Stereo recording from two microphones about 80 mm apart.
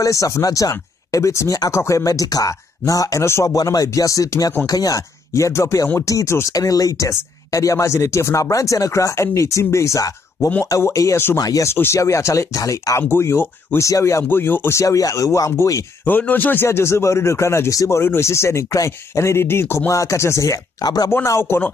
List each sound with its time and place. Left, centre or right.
0.0 s speech: left
11.7 s speech: left
12.0 s speech: left
13.1 s speech: left
14.3 s speech: left
14.8 s speech: left
16.1 s speech: left
19.9 s speech: left
20.8 s speech: left
21.3 s speech: left